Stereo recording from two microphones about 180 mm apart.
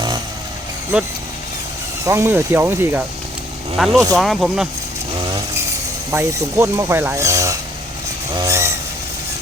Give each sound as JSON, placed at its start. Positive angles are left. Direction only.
{"t": 0.9, "sound": "speech", "side_deg": -5}
{"t": 6.1, "sound": "speech", "side_deg": -15}
{"t": 8.4, "sound": "vehicle", "side_deg": -15}